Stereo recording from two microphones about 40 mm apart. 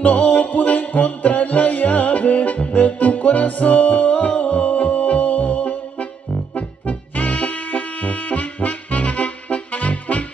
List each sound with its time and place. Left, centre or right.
0.0 s music: left